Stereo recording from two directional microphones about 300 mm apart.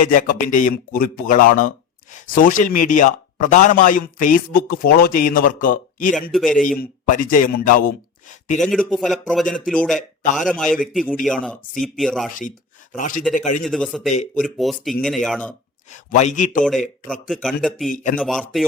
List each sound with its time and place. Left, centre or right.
0.0 s a man's voice: left
6.3 s a man's voice: centre
6.6 s speech: left
8.6 s a man's voice: centre
12.3 s a man's voice: left
13.7 s a man's voice: centre
15.9 s a man's voice: left
17.1 s a man's voice: centre
17.8 s a man's voice: left
18.2 s a man's voice: centre